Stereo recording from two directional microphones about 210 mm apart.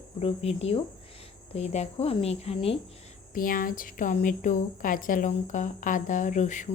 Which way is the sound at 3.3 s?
40° left (ahead or behind).